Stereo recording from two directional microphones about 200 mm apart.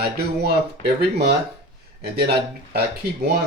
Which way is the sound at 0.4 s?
55° right (ahead or behind).